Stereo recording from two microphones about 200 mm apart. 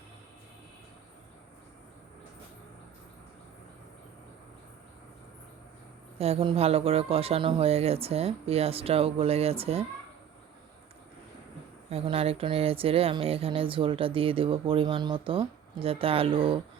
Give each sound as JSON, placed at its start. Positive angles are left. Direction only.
{"t": 6.1, "sound": "speech", "side_deg": -30}
{"t": 11.9, "sound": "speech", "side_deg": -30}